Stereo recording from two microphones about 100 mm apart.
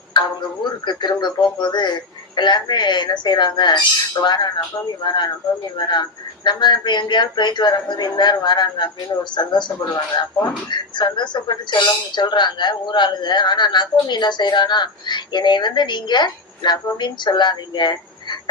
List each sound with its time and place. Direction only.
0.1 s tick-tock: 50° left (ahead or behind)
0.9 s a woman's voice: 50° left (ahead or behind)